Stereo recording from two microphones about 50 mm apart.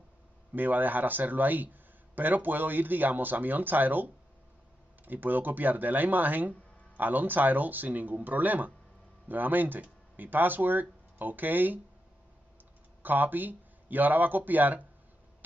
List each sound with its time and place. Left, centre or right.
0.6 s speech: right
13.0 s speech: right